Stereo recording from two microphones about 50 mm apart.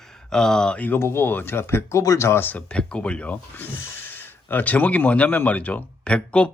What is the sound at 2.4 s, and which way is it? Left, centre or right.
Speech, left.